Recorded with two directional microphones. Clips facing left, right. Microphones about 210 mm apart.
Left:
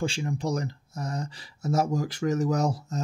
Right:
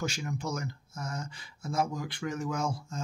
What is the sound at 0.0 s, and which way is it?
Speech, 30° left (ahead or behind).